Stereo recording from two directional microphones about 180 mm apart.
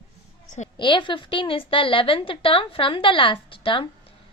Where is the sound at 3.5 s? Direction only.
30° left (ahead or behind).